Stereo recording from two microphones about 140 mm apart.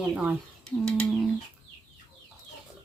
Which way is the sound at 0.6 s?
5° left (ahead or behind).